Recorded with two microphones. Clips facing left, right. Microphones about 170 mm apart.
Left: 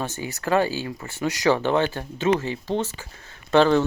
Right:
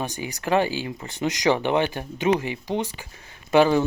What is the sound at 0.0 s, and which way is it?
Speech, 15° right (ahead or behind).